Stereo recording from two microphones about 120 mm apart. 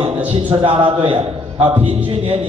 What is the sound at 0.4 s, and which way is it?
Speech, 45° right (ahead or behind).